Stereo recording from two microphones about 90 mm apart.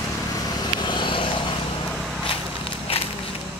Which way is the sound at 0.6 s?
55° left (ahead or behind).